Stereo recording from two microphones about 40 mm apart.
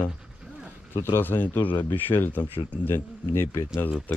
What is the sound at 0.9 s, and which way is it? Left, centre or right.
Speech, left.